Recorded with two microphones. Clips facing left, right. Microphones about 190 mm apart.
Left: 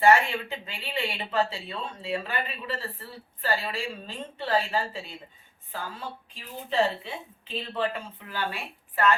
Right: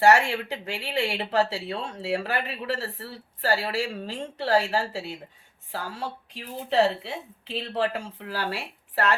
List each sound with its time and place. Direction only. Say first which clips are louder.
0.0 s speech: right 1 dB; 80° right